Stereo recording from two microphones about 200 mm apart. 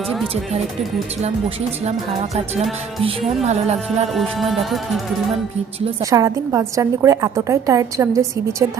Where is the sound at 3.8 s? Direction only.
Centre (ahead or behind).